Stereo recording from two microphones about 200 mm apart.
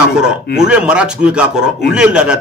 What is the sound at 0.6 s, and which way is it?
A man's voice, 5° right (ahead or behind).